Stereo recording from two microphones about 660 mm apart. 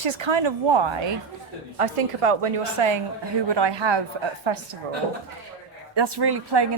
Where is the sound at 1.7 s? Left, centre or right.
Right.